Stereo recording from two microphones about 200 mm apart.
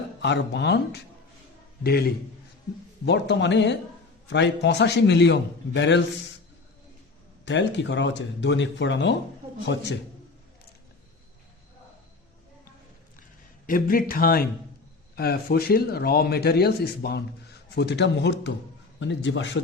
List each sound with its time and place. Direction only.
0.2 s a man's voice: 60° left (ahead or behind)
7.4 s speech: 60° left (ahead or behind)
13.7 s a man's voice: 45° left (ahead or behind); by 19.5 s 65° left (ahead or behind)